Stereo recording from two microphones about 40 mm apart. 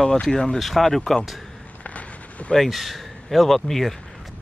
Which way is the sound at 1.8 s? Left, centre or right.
Left.